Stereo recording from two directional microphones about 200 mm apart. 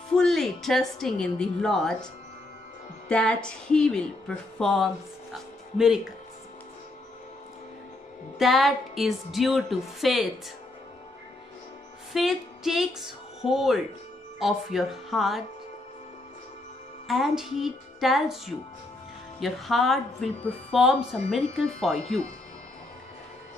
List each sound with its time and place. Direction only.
0.1 s a woman's voice: centre (ahead or behind)
3.1 s a woman's voice: 5° left (ahead or behind)
8.4 s a woman's voice: centre (ahead or behind)
12.1 s music: centre (ahead or behind)
13.5 s a woman's voice: centre (ahead or behind)
17.1 s a woman's voice: centre (ahead or behind)